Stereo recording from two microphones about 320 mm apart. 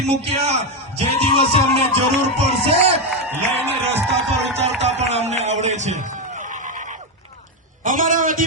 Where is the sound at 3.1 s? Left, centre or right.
Centre.